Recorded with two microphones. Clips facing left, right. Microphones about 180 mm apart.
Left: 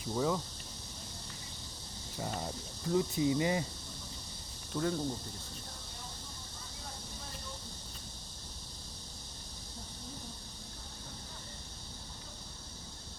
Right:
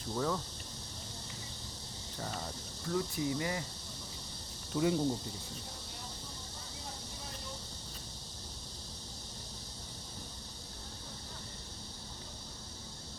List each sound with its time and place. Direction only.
0.0 s speech: 10° left (ahead or behind)
2.1 s speech: 10° left (ahead or behind)
4.7 s speech: 10° right (ahead or behind)